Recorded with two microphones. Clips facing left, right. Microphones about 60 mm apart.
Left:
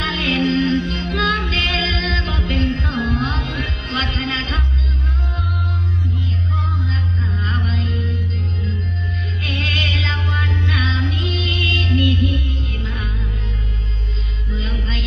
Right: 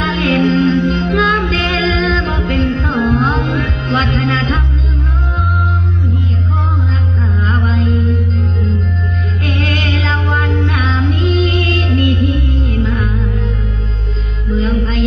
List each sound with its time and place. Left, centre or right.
0.0 s music: right
7.3 s music: right
9.5 s music: right
14.5 s music: right